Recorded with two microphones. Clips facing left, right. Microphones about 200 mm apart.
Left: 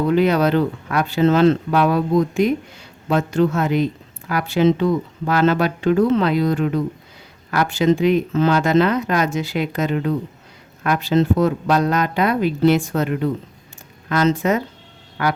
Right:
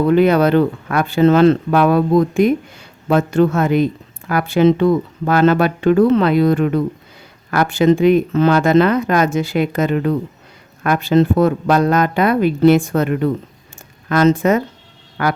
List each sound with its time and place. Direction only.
0.1 s speech: 55° right (ahead or behind)